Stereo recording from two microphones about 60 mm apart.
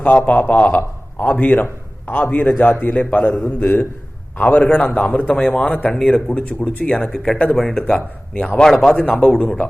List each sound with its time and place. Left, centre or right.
0.0 s a man's voice: centre
7.1 s speech: centre